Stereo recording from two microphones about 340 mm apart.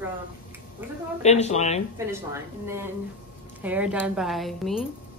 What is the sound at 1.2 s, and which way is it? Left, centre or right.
Speech, centre.